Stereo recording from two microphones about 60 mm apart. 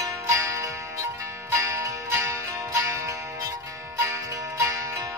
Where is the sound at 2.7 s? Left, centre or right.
Right.